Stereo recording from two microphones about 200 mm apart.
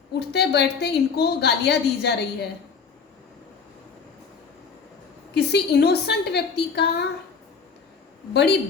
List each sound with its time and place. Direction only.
0.2 s a woman's voice: 55° left (ahead or behind)
5.3 s a woman's voice: 55° left (ahead or behind)
8.3 s a woman's voice: 55° left (ahead or behind)